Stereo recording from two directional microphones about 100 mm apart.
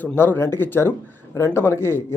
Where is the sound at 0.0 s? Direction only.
20° left (ahead or behind).